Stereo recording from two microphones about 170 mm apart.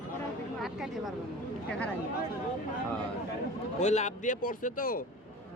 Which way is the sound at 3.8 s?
45° left (ahead or behind).